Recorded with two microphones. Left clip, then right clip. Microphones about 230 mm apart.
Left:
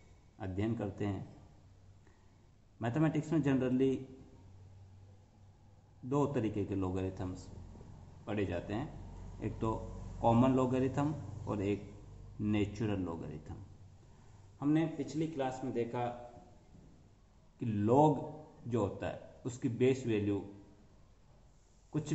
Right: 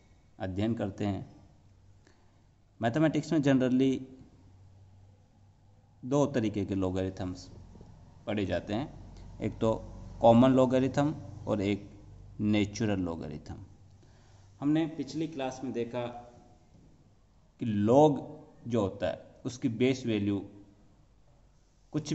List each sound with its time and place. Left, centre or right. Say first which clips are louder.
0.4 s a man's voice: right 5 dB; right
2.8 s a man's voice: right 6 dB; right
6.0 s a man's voice: right 5 dB; right
14.6 s a man's voice: right 3 dB; right
17.6 s a man's voice: right 6 dB; right